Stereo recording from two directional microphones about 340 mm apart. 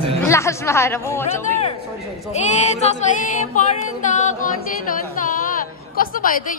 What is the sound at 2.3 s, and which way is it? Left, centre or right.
Speech, centre.